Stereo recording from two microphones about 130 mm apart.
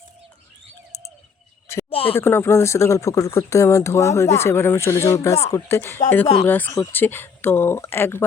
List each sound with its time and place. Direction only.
1.9 s speech: 45° left (ahead or behind)
2.1 s speech: 20° left (ahead or behind)